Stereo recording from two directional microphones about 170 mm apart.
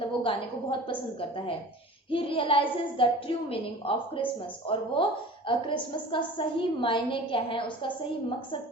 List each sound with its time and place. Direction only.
0.2 s a woman's voice: 30° left (ahead or behind)
2.0 s a woman's voice: 30° left (ahead or behind)